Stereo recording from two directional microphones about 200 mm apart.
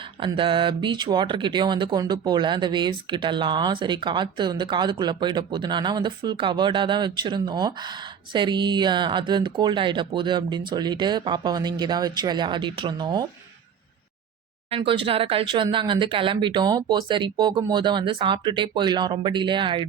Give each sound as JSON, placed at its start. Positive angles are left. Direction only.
{"t": 0.2, "sound": "speech", "side_deg": -25}
{"t": 14.7, "sound": "speech", "side_deg": -25}